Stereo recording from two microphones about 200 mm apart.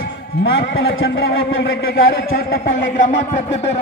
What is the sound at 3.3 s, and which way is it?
Music, 30° left (ahead or behind).